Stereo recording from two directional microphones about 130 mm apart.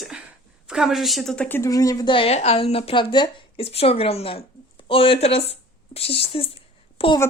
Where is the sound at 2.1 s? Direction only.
50° left (ahead or behind).